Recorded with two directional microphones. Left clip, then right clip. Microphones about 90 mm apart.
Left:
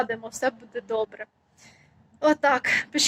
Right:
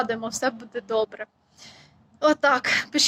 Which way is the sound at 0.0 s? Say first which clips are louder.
Right 1 dB; 35° right (ahead or behind).